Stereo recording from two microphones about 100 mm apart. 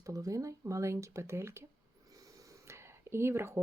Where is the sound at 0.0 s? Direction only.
35° right (ahead or behind).